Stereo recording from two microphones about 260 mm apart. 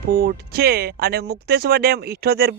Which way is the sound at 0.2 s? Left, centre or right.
Right.